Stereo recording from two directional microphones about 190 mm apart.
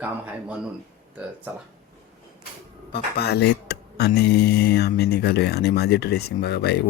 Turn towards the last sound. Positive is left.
turn(degrees=60)  # may be behind; listen again after turning